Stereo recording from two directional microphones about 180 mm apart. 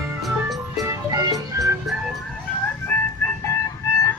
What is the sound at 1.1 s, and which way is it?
Music, 20° right (ahead or behind).